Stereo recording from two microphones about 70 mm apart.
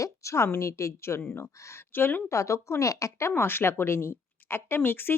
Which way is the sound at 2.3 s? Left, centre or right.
Left.